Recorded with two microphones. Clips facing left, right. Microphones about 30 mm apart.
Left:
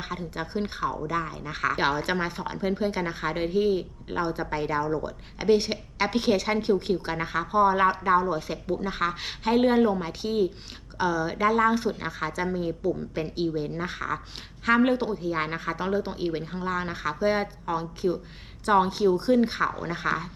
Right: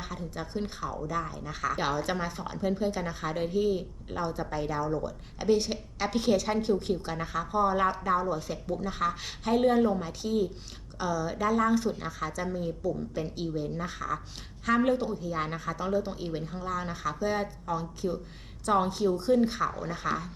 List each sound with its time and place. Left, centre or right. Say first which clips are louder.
0.0 s speech: left 4 dB; left